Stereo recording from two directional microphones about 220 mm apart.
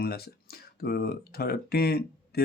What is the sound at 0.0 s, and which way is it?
Speech, 45° left (ahead or behind).